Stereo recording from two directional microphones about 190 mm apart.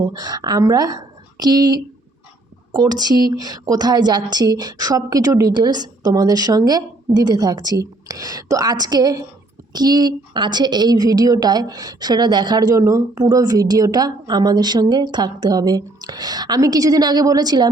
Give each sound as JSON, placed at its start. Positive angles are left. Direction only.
{"t": 0.0, "sound": "a woman's voice", "side_deg": -20}